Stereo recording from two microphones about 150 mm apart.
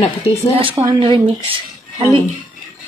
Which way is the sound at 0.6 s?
35° right (ahead or behind).